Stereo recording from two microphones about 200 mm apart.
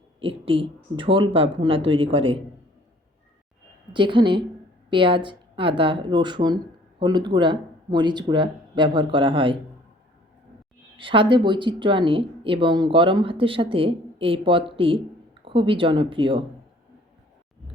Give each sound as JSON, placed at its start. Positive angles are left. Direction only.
{"t": 0.2, "sound": "speech", "side_deg": -25}
{"t": 3.9, "sound": "speech", "side_deg": -25}
{"t": 10.9, "sound": "speech", "side_deg": -25}